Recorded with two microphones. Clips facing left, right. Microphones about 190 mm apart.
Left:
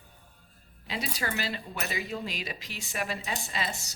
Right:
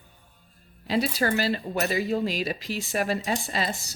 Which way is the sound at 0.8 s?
40° right (ahead or behind).